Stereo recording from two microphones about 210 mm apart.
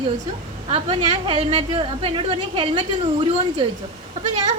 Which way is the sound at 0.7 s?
25° right (ahead or behind).